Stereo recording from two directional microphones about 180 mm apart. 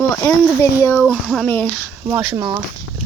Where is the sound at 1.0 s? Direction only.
Centre (ahead or behind).